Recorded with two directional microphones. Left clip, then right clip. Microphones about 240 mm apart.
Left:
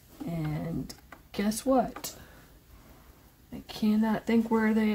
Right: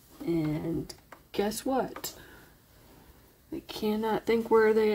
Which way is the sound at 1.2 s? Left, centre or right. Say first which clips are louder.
Left 1 dB; right.